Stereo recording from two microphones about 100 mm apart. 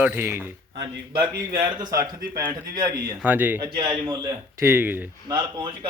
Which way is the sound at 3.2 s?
15° right (ahead or behind).